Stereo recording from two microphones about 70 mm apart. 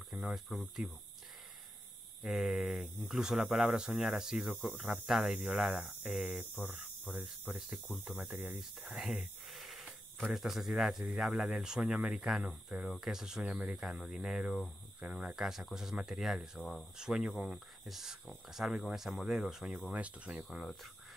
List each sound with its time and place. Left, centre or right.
0.1 s speech: centre
2.2 s speech: centre
7.1 s speech: centre
7.5 s speech: centre
15.0 s cricket: centre
15.2 s speech: centre
16.9 s speech: centre
20.4 s speech: centre